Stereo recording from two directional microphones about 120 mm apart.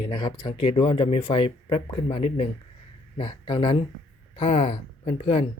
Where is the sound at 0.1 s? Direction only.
40° left (ahead or behind).